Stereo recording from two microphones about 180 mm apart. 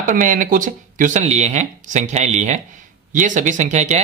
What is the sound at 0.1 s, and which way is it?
Speech, 45° right (ahead or behind).